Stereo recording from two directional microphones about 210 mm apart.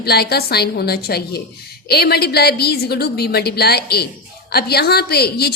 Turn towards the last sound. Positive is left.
turn(degrees=50)  # may be behind; listen again after turning